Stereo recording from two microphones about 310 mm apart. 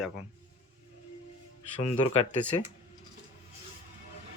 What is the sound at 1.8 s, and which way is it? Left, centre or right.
Speech, centre.